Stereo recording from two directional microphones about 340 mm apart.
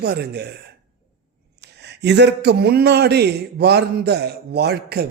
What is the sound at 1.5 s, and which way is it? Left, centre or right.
A man's voice, right.